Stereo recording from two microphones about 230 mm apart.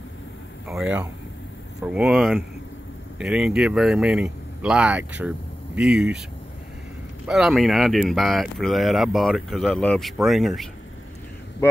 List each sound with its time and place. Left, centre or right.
0.7 s speech: centre
7.2 s speech: centre